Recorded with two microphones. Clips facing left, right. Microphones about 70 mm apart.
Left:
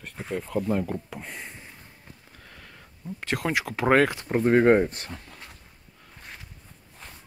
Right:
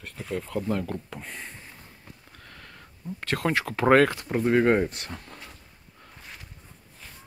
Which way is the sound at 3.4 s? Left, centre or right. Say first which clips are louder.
Right 2 dB; centre.